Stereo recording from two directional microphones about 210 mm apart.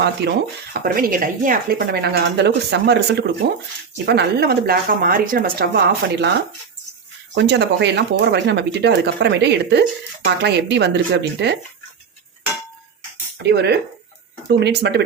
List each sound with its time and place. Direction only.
0.2 s speech: 55° right (ahead or behind)
0.7 s speech: 45° right (ahead or behind)
7.3 s speech: 55° right (ahead or behind)
13.4 s speech: 55° right (ahead or behind)